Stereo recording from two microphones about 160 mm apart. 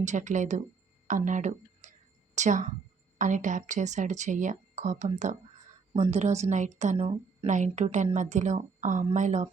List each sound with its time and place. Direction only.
0.0 s speech: 50° right (ahead or behind)
6.9 s a woman's voice: 35° right (ahead or behind)
7.4 s speech: 50° right (ahead or behind)